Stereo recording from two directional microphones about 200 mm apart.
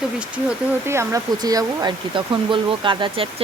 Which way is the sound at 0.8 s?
15° right (ahead or behind).